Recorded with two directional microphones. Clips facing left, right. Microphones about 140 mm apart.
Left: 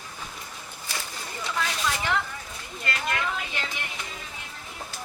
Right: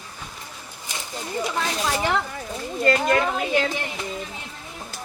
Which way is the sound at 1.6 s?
35° right (ahead or behind).